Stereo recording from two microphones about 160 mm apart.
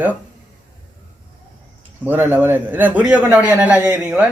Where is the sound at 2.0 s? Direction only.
10° right (ahead or behind).